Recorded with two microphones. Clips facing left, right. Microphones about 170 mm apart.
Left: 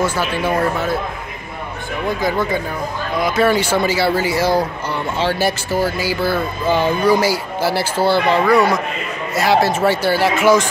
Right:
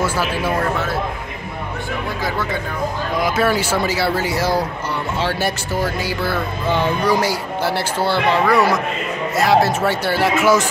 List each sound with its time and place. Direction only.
0.0 s speech: 5° right (ahead or behind)
2.2 s speech: 15° left (ahead or behind)
3.2 s speech: 5° right (ahead or behind)